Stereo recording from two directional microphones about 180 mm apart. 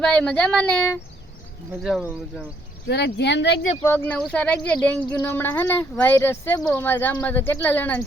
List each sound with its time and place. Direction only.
0.0 s speech: 5° left (ahead or behind)
2.8 s speech: 70° left (ahead or behind)
3.8 s speech: 10° left (ahead or behind)